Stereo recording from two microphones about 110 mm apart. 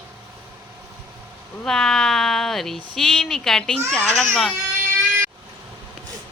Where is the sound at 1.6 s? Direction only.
5° left (ahead or behind).